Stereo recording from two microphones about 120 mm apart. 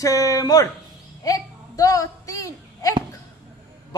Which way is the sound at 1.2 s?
30° left (ahead or behind).